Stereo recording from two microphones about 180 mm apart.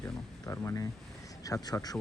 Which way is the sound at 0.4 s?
15° left (ahead or behind).